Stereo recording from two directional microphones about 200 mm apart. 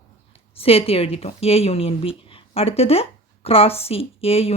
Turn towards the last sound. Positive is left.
turn(degrees=30)  # may be behind; listen again after turning